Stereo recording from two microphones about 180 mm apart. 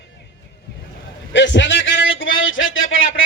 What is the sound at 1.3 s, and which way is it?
A man's voice, 80° left.